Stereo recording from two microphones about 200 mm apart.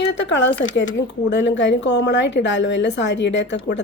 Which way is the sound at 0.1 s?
65° left (ahead or behind).